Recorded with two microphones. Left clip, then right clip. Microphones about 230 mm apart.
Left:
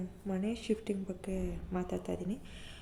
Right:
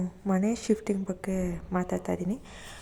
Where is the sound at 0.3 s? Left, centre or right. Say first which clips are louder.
Right 8 dB; right.